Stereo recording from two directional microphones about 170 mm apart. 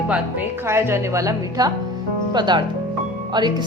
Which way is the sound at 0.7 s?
15° right (ahead or behind).